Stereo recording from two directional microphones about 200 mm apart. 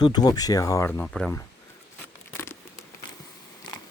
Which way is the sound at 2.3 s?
10° left (ahead or behind).